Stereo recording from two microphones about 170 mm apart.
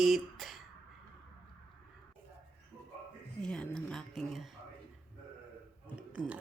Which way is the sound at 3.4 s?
5° left (ahead or behind).